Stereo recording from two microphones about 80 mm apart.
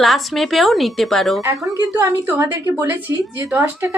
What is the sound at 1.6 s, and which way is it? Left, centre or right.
A woman's voice, right.